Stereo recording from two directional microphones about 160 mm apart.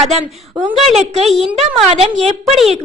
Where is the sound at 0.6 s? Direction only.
35° right (ahead or behind).